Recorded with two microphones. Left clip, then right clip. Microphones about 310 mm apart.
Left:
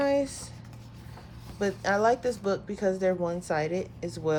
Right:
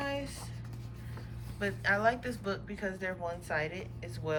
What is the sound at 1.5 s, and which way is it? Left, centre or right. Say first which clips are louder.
A woman's voice: left 4 dB; centre.